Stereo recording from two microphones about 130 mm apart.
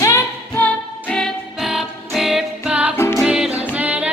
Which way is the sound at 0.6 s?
10° left (ahead or behind).